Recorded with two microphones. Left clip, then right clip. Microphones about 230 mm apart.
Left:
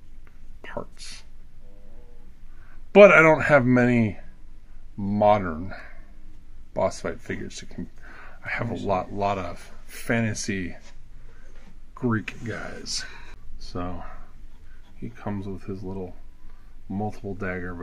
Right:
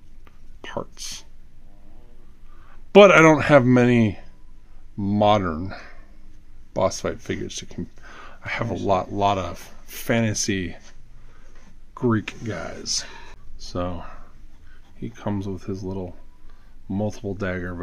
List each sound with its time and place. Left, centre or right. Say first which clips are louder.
0.6 s speech: right 4 dB; right
2.9 s speech: right 1 dB; right
11.9 s speech: right 4 dB; right